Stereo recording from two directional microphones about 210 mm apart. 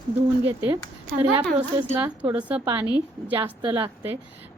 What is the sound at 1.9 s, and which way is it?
A woman's voice, 10° right (ahead or behind).